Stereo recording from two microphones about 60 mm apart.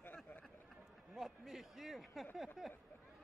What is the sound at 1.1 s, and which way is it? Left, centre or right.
A man's voice, centre.